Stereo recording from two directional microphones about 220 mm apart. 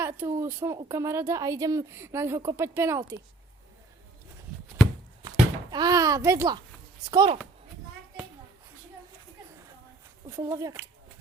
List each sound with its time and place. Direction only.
0.0 s a woman's voice: 10° right (ahead or behind)
5.7 s a woman's voice: 15° right (ahead or behind)
10.2 s a woman's voice: 15° right (ahead or behind)